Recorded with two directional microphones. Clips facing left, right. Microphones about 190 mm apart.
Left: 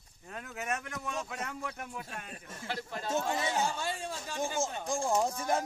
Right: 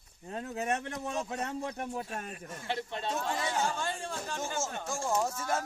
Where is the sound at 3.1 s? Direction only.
25° left (ahead or behind).